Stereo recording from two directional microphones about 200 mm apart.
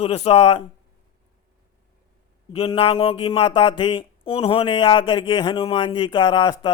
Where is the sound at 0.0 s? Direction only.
30° left (ahead or behind).